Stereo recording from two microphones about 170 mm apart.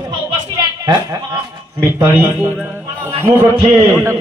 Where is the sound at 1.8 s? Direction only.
15° right (ahead or behind).